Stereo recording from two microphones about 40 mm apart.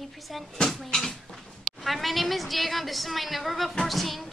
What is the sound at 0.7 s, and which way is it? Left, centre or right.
Speech, centre.